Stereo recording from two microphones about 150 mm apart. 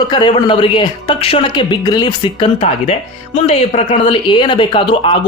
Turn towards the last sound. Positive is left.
turn(degrees=35)  # may be behind; listen again after turning